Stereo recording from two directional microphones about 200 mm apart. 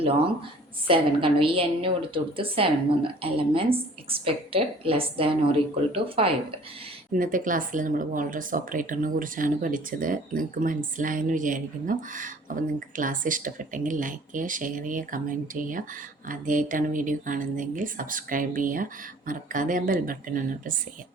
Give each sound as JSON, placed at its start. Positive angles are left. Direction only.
{"t": 0.9, "sound": "a woman's voice", "side_deg": -25}
{"t": 7.2, "sound": "speech", "side_deg": -45}